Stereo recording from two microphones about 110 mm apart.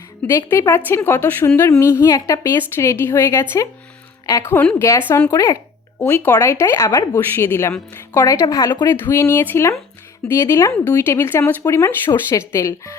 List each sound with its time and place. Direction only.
0.3 s a woman's voice: 25° left (ahead or behind)
6.0 s a woman's voice: 15° left (ahead or behind); by 7.2 s 30° left (ahead or behind)
7.3 s a woman's voice: 20° left (ahead or behind)
8.9 s a woman's voice: 25° left (ahead or behind)